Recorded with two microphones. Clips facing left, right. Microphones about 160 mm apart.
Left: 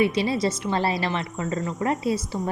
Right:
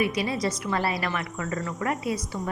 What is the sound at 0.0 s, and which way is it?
A woman's voice, 25° left (ahead or behind).